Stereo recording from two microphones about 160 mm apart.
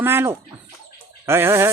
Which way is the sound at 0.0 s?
15° right (ahead or behind).